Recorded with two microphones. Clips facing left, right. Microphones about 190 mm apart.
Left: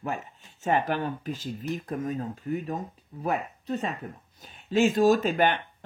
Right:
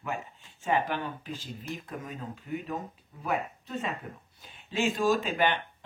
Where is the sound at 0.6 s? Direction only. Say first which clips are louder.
Left 3 dB; 40° left (ahead or behind).